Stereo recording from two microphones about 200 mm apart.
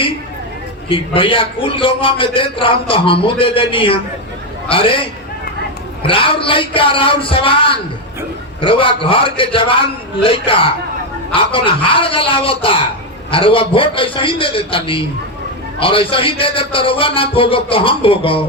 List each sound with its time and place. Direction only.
0.9 s a man's voice: 25° left (ahead or behind)